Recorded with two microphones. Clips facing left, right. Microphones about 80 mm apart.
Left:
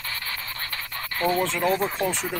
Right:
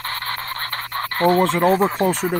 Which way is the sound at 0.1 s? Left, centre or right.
Right.